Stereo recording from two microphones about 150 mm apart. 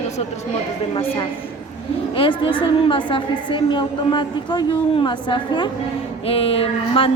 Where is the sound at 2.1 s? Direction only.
35° left (ahead or behind).